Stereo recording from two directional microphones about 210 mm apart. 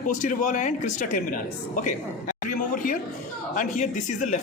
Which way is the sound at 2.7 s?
40° left (ahead or behind).